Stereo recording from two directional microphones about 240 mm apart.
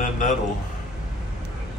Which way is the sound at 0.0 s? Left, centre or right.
Left.